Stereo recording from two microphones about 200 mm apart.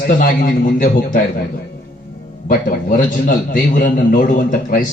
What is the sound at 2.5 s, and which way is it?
A man's voice, 45° left (ahead or behind).